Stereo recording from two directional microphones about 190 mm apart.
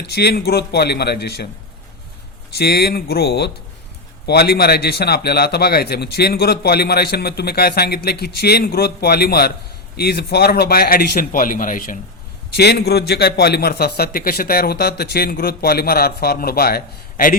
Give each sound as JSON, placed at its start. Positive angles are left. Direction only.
{"t": 0.1, "sound": "a man's voice", "side_deg": 60}
{"t": 2.6, "sound": "a man's voice", "side_deg": 55}
{"t": 12.5, "sound": "a man's voice", "side_deg": 60}